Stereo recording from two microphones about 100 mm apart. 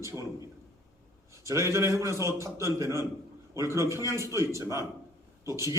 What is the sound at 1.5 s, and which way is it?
A man's voice, 30° right (ahead or behind).